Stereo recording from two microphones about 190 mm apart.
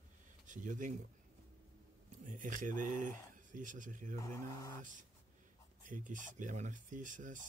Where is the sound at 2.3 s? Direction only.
45° right (ahead or behind).